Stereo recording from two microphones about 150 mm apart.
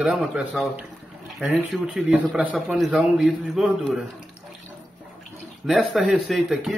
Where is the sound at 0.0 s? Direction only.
5° right (ahead or behind).